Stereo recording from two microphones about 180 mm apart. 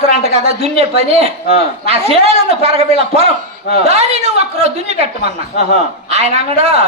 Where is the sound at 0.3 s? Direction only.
35° right (ahead or behind).